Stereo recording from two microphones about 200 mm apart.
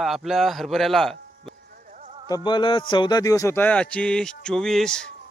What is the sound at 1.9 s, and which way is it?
Music, 40° right (ahead or behind).